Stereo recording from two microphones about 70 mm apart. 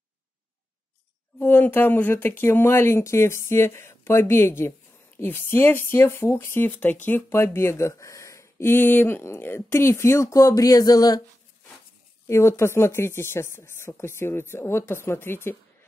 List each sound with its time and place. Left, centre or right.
1.4 s speech: left
12.3 s speech: left